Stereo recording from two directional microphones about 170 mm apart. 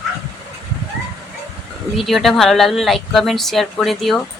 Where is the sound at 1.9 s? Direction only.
Centre (ahead or behind).